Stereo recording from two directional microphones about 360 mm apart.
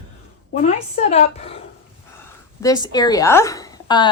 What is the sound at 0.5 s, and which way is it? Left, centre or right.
Speech, centre.